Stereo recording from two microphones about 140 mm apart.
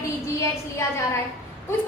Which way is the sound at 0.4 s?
20° left (ahead or behind).